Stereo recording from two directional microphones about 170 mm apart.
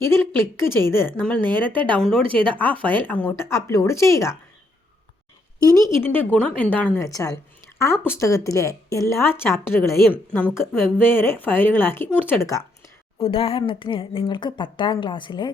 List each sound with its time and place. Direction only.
0.0 s a woman's voice: 15° left (ahead or behind)
2.2 s speech: 30° right (ahead or behind)
2.5 s a woman's voice: 10° left (ahead or behind)
5.7 s a woman's voice: 10° left (ahead or behind)
13.1 s speech: 35° left (ahead or behind)